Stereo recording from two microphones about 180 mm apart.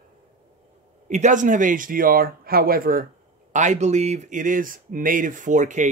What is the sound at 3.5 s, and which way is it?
Speech, 40° right (ahead or behind).